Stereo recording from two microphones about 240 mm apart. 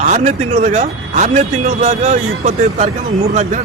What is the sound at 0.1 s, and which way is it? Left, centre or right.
Speech, right.